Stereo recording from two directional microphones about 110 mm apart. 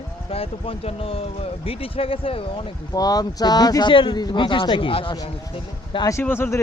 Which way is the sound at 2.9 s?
35° left (ahead or behind).